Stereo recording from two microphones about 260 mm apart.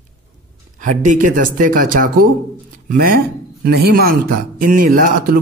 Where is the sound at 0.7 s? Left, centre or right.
Right.